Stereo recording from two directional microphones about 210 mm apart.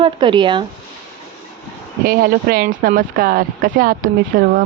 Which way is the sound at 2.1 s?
45° right (ahead or behind).